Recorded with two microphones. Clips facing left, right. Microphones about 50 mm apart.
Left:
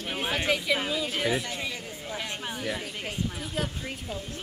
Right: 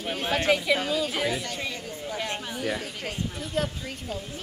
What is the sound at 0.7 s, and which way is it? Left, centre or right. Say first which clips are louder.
Speech: right 3 dB; centre.